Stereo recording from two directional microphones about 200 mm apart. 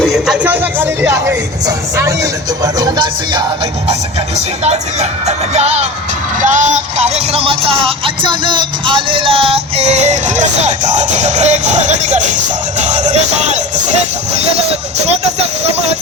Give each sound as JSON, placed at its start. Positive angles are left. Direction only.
{"t": 0.0, "sound": "speech", "side_deg": 0}
{"t": 2.7, "sound": "music", "side_deg": -20}
{"t": 4.6, "sound": "music", "side_deg": -35}